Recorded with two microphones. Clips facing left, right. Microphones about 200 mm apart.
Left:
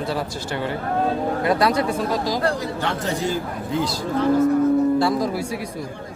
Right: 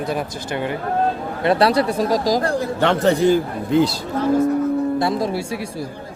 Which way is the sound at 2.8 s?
65° right (ahead or behind).